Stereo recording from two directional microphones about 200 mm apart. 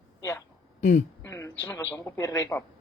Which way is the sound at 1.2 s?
15° left (ahead or behind).